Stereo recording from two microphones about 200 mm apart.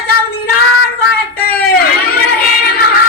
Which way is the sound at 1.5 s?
50° left (ahead or behind).